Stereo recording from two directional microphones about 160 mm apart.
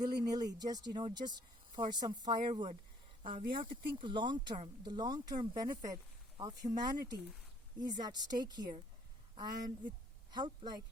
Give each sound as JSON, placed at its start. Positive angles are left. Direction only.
{"t": 0.0, "sound": "speech", "side_deg": -25}